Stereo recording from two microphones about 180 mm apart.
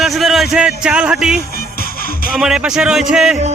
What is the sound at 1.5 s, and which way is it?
Music, 55° left (ahead or behind).